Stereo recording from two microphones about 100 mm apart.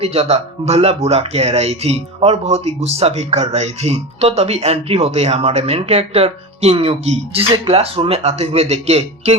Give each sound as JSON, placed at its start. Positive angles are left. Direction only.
{"t": 0.0, "sound": "speech", "side_deg": -90}